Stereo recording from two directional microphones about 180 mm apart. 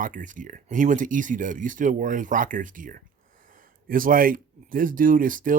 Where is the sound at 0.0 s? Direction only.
45° right (ahead or behind).